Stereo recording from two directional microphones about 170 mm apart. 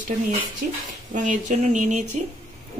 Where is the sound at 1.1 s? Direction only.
45° right (ahead or behind).